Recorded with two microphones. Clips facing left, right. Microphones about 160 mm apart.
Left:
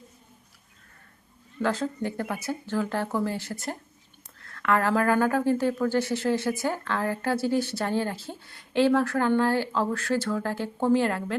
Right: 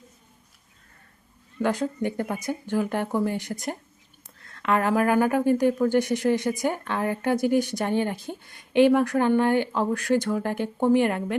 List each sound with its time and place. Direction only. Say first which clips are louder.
1.6 s speech: right 2 dB; 15° right (ahead or behind)